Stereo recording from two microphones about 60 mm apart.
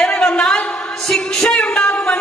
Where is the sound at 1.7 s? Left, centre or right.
Centre.